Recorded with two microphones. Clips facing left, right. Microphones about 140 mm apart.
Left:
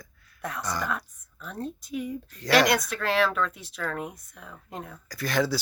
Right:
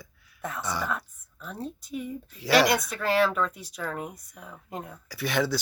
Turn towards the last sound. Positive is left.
turn(degrees=0)  # may be behind; listen again after turning